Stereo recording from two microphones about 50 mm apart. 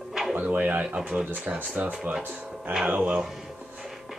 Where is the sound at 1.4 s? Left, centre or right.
Right.